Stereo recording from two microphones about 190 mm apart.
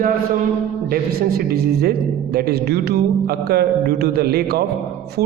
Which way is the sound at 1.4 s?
55° right (ahead or behind).